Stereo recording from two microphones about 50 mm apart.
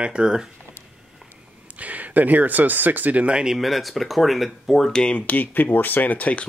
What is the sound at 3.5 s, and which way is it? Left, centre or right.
Speech, centre.